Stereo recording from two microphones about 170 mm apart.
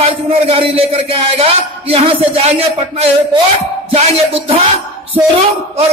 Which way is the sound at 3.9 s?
35° right (ahead or behind).